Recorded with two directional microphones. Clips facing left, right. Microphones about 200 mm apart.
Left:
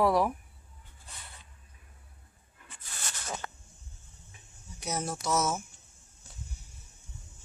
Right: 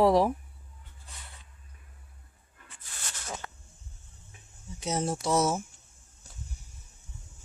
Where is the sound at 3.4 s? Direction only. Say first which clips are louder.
Left 2 dB; 50° left (ahead or behind).